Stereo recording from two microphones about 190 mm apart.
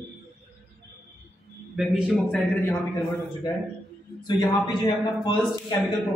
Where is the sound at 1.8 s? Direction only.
5° right (ahead or behind).